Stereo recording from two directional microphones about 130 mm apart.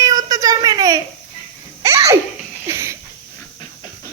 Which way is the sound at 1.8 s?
25° right (ahead or behind).